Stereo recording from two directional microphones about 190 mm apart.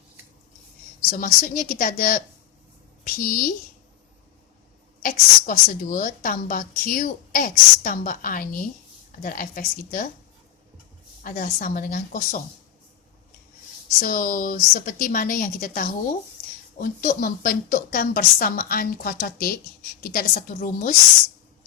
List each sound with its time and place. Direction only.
1.1 s a woman's voice: 45° left (ahead or behind)
5.0 s a woman's voice: 45° left (ahead or behind)
11.2 s a woman's voice: 45° left (ahead or behind)
14.0 s a woman's voice: 45° left (ahead or behind)